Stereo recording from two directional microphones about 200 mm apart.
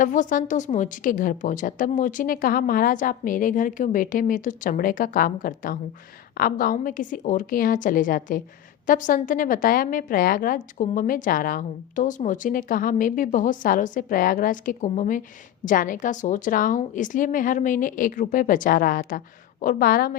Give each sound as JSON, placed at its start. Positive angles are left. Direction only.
{"t": 0.0, "sound": "a woman's voice", "side_deg": 40}